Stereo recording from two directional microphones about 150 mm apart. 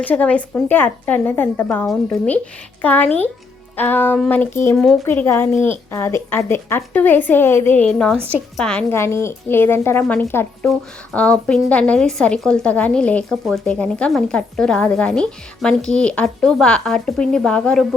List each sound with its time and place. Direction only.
0.0 s a woman's voice: 10° left (ahead or behind)
8.9 s a woman's voice: 15° left (ahead or behind)